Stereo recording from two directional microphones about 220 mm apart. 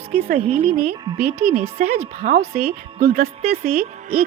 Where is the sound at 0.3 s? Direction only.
25° right (ahead or behind).